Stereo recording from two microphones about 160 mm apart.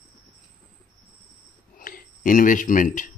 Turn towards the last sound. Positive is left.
turn(degrees=55)  # may be behind; listen again after turning